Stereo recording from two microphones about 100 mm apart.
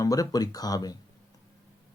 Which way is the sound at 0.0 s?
35° left (ahead or behind).